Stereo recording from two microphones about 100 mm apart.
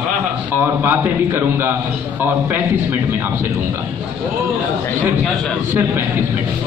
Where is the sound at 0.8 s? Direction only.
20° right (ahead or behind).